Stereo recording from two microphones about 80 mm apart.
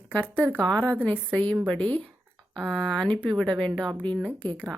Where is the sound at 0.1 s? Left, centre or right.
Centre.